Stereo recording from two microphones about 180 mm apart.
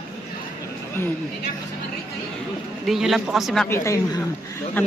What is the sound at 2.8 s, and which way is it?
Speech, centre (ahead or behind).